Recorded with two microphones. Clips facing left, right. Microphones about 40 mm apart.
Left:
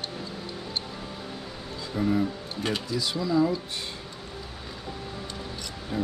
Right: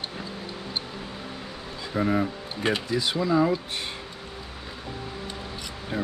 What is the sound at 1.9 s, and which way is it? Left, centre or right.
Speech, right.